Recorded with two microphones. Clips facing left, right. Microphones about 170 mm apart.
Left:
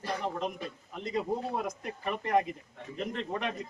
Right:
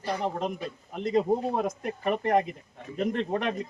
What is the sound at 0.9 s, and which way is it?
A man's voice, 55° right (ahead or behind).